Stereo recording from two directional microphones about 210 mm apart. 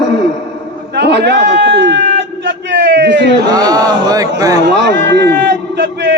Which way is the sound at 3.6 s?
15° right (ahead or behind).